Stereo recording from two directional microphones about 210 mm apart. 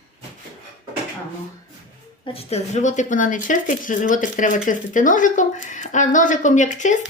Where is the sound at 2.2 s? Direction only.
30° left (ahead or behind).